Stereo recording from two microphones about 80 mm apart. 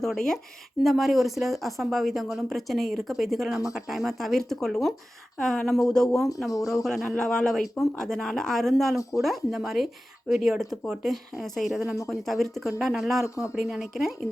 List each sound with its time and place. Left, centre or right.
0.0 s speech: centre
13.2 s speech: left
13.6 s speech: centre